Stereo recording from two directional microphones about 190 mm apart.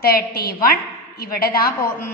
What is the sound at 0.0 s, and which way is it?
A woman's voice, 50° left (ahead or behind).